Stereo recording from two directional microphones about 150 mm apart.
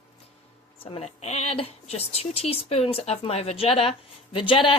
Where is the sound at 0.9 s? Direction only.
45° left (ahead or behind).